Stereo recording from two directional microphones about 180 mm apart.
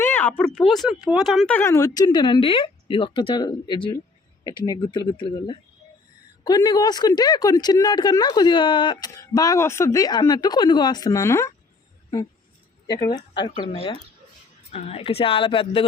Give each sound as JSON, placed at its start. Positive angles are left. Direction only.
{"t": 0.0, "sound": "speech", "side_deg": 10}
{"t": 13.1, "sound": "a woman's voice", "side_deg": 25}